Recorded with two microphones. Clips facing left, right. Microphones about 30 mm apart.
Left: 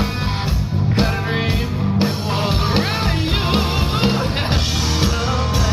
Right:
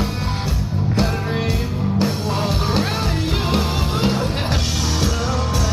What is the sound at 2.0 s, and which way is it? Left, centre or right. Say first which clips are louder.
Music: left 1 dB; left.